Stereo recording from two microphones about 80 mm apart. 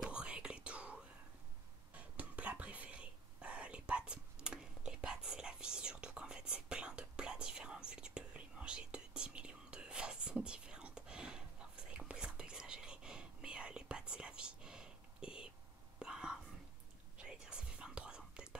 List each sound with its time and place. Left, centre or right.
0.0 s whispering: centre